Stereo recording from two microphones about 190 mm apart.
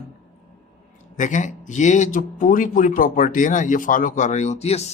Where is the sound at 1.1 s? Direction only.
40° left (ahead or behind).